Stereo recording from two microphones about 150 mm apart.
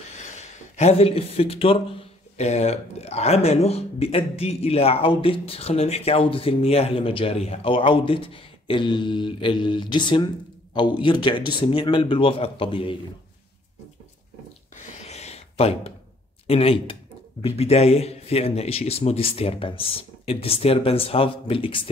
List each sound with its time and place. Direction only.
0.4 s speech: 45° left (ahead or behind)
14.9 s a sound: 45° left (ahead or behind)
16.4 s speech: 40° left (ahead or behind)